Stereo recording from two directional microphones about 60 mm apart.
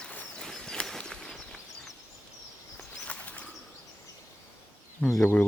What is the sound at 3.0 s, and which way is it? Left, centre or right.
Bird, left.